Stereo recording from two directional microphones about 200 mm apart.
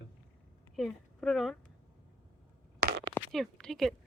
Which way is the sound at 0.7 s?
Centre (ahead or behind).